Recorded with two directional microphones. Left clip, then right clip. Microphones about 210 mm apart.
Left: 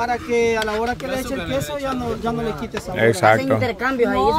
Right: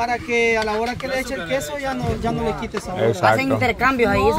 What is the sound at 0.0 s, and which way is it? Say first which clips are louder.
Speech: even; 10° right (ahead or behind).